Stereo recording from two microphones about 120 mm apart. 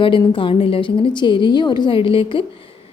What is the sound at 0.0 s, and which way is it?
A woman's voice, 45° left (ahead or behind).